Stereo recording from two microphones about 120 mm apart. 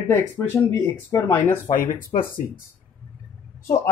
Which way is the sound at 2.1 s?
90° left.